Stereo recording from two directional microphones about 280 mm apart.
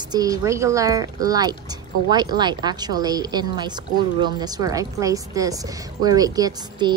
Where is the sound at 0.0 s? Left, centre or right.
Centre.